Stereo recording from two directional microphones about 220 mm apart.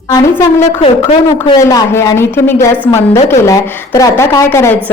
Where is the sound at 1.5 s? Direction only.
15° left (ahead or behind).